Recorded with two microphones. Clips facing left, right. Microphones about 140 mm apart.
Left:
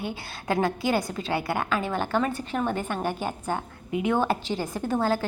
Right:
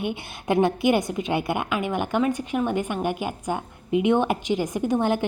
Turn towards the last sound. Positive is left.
turn(degrees=-20)  # may be behind; listen again after turning